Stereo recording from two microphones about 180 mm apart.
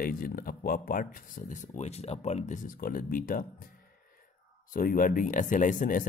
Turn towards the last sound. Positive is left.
turn(degrees=45)  # may be behind; listen again after turning